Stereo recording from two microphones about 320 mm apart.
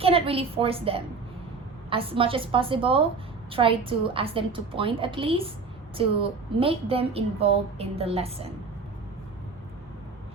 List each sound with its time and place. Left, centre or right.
0.0 s a woman's voice: centre